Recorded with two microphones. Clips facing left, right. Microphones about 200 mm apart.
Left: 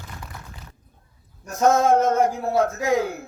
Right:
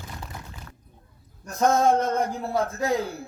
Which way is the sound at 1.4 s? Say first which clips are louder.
Left 2 dB; 35° right (ahead or behind).